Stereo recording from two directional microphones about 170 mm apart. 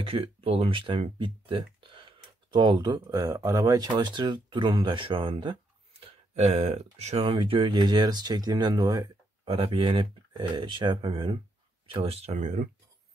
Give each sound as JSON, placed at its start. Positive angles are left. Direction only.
{"t": 0.0, "sound": "speech", "side_deg": -35}